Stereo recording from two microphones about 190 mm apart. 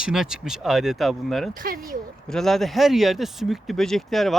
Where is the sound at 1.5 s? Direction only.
50° right (ahead or behind).